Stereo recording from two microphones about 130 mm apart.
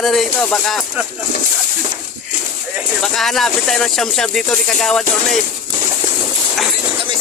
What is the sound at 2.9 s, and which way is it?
Speech, 5° left (ahead or behind).